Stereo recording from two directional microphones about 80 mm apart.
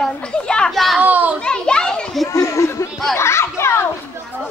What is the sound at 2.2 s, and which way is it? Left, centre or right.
Chatter, left.